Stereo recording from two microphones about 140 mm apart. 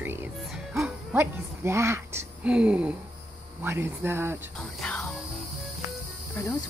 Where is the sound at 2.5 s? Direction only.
10° right (ahead or behind).